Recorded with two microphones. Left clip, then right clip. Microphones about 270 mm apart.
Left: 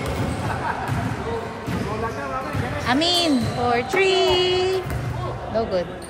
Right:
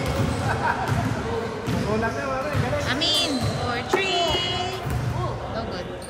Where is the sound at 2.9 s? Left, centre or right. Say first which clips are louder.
Left 5 dB; left.